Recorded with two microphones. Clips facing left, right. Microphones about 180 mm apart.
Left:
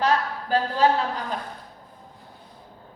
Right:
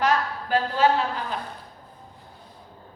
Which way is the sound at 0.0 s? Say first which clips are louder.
Even; 35° left (ahead or behind).